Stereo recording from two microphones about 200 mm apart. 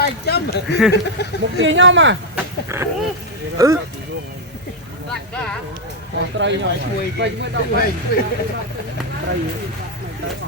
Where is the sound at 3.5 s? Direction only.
15° right (ahead or behind).